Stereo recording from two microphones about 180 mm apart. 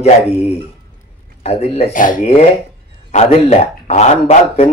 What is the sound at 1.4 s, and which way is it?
Speech, 35° left (ahead or behind).